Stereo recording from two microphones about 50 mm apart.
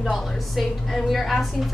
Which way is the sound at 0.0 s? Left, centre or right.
Centre.